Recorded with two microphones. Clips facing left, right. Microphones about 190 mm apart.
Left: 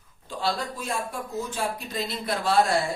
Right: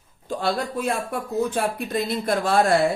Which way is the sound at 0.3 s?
55° right (ahead or behind).